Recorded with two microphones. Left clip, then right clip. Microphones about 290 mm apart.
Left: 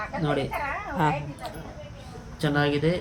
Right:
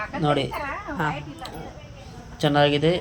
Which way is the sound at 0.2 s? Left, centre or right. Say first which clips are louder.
Right 5 dB; centre.